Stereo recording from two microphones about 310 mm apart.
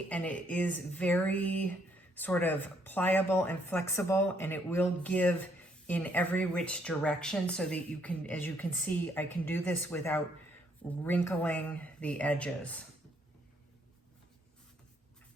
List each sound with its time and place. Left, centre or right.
0.1 s speech: centre